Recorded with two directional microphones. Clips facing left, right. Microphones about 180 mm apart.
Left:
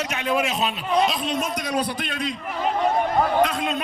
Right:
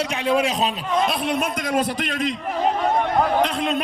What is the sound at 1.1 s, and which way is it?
Speech, 60° right (ahead or behind).